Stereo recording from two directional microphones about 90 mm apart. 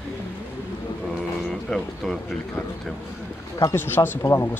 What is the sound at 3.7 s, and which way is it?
Speech, 25° left (ahead or behind).